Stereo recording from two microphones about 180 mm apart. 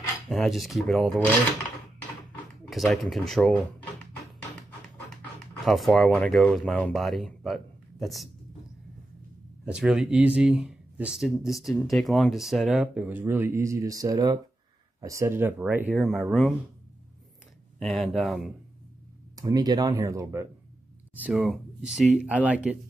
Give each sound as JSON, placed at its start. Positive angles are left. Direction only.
{"t": 0.3, "sound": "speech", "side_deg": 0}
{"t": 2.7, "sound": "speech", "side_deg": 0}
{"t": 5.7, "sound": "speech", "side_deg": 0}
{"t": 9.7, "sound": "speech", "side_deg": -5}
{"t": 16.0, "sound": "speech", "side_deg": 0}
{"t": 17.7, "sound": "speech", "side_deg": 0}
{"t": 19.3, "sound": "speech", "side_deg": -20}
{"t": 21.1, "sound": "speech", "side_deg": -5}